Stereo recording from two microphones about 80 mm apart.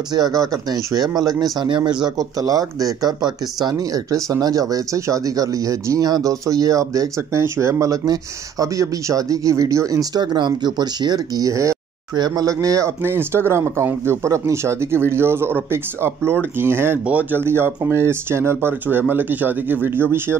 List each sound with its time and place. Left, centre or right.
0.1 s speech: right
1.6 s speech: right
10.2 s speech: right
13.0 s speech: right